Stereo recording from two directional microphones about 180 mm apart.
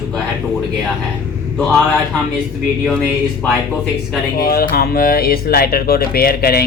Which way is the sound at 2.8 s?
5° left (ahead or behind).